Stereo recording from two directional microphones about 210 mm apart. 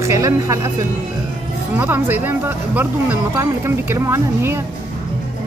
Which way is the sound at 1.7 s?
10° right (ahead or behind).